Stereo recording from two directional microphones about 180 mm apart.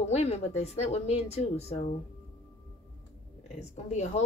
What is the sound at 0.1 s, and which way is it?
Speech, 35° left (ahead or behind).